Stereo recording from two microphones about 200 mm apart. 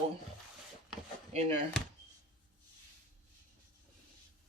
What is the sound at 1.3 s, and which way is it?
Speech, 30° right (ahead or behind).